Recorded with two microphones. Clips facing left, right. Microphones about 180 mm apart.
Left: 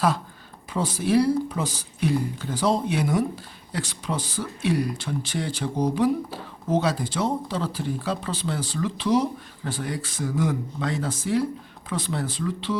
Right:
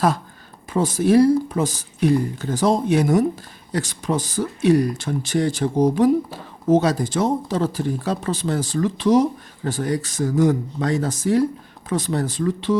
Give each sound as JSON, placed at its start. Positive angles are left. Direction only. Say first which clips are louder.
{"t": 0.7, "sound": "speech", "louder": "right 6 dB", "side_deg": -45}